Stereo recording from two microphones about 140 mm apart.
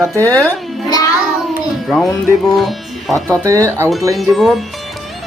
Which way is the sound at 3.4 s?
20° right (ahead or behind).